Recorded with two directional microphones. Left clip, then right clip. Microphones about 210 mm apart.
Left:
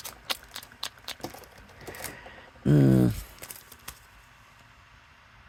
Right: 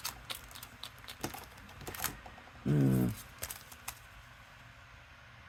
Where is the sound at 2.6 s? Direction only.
35° left (ahead or behind).